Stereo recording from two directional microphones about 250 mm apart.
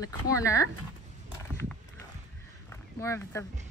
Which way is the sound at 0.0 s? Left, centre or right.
Centre.